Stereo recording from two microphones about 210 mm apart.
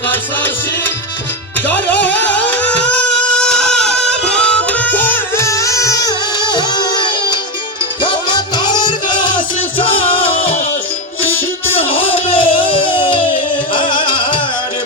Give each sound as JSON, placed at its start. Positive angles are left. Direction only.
{"t": 1.6, "sound": "music", "side_deg": 10}